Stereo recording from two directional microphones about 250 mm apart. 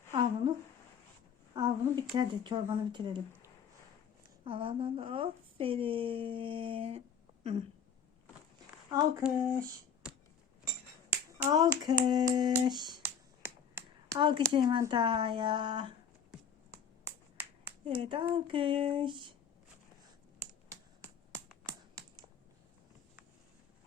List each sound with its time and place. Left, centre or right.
0.1 s a sound: centre
1.5 s speech: centre
4.4 s a woman's voice: right
9.2 s speech: centre
11.3 s speech: centre
18.0 s a woman's voice: right
20.7 s finger snapping: centre